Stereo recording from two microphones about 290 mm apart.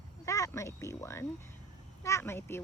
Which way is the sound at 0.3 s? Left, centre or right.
Centre.